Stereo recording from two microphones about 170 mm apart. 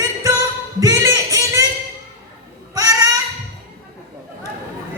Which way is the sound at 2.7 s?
20° right (ahead or behind).